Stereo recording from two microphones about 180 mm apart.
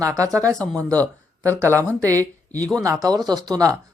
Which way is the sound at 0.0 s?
20° right (ahead or behind).